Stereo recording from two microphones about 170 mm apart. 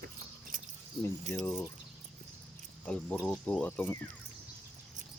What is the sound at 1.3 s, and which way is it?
Speech, 45° right (ahead or behind).